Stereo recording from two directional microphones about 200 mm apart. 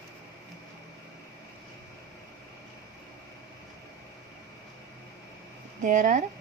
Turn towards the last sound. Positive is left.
turn(degrees=-40)  # may be behind; listen again after turning